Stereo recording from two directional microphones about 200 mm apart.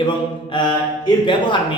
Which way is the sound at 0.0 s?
20° left (ahead or behind).